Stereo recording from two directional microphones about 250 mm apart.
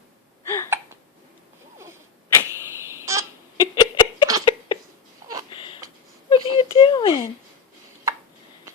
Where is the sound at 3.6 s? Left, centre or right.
Centre.